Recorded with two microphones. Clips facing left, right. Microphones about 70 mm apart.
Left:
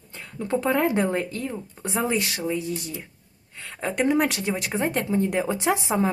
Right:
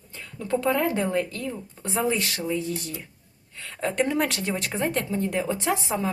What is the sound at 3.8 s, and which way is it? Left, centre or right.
Speech, centre.